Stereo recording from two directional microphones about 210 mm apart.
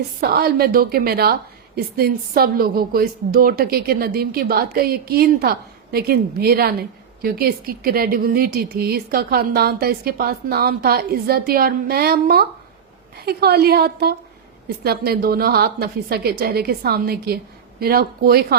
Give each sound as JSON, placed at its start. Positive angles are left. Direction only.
{"t": 0.2, "sound": "a woman's voice", "side_deg": -45}